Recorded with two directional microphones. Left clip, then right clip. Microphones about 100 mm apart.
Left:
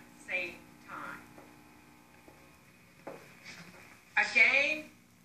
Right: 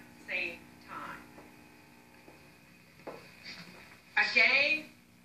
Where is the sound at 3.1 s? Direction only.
30° left (ahead or behind).